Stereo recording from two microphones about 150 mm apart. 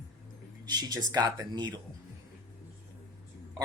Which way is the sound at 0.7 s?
25° right (ahead or behind).